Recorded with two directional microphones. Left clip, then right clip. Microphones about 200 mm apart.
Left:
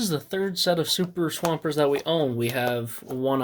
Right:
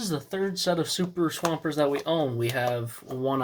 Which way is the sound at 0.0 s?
40° left (ahead or behind).